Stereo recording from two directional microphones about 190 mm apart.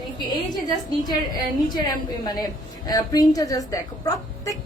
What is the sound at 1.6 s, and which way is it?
A woman's voice, 20° left (ahead or behind).